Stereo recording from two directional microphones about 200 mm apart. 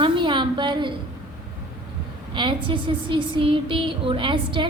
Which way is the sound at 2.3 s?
25° right (ahead or behind).